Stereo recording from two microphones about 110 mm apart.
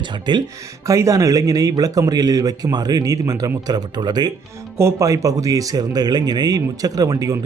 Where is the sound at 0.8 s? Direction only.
30° right (ahead or behind).